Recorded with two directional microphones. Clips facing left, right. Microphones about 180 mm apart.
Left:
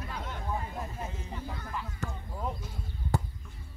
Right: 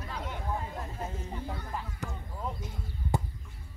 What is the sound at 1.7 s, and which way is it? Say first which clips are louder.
Basketball bounce: left 1 dB; 40° right (ahead or behind).